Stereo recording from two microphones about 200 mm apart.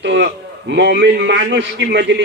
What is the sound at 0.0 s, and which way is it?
A man's voice, 60° right (ahead or behind).